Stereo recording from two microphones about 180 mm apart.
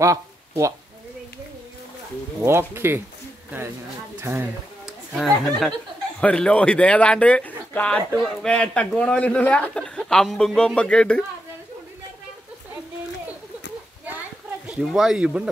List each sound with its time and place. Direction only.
0.0 s speech: 15° right (ahead or behind)
2.4 s speech: 15° right (ahead or behind)
4.2 s speech: 15° right (ahead or behind)
5.1 s a man's voice: centre (ahead or behind)
14.7 s a man's voice: 5° right (ahead or behind)